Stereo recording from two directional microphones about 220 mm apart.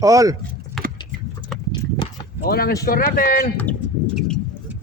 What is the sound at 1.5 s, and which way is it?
Horse, 5° left (ahead or behind).